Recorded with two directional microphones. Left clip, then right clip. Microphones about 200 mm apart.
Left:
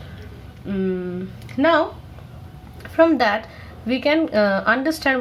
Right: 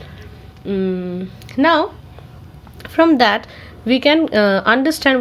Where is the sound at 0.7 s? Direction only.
45° right (ahead or behind).